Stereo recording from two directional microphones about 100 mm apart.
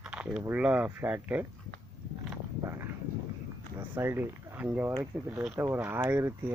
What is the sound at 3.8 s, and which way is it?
Speech, 20° right (ahead or behind).